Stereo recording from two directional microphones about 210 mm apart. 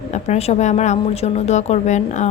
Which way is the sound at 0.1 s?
30° left (ahead or behind).